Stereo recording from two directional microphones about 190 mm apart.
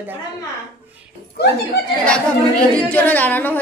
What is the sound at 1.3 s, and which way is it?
Speech, 60° left (ahead or behind).